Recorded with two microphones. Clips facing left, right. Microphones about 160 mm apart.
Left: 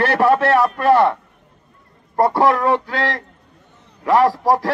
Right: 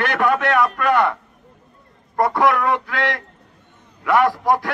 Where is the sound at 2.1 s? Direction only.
30° left (ahead or behind).